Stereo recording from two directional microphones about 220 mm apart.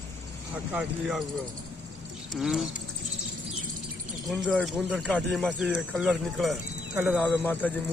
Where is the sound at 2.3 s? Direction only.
Centre (ahead or behind).